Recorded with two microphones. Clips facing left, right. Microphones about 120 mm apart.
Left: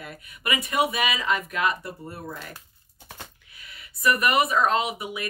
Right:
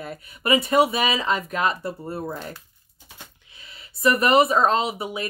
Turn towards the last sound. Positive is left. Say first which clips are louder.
# right 2 dB
turn(degrees=-30)  # may be behind; listen again after turning